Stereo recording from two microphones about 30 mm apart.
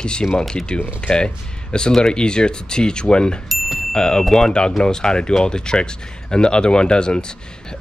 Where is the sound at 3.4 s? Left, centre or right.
Centre.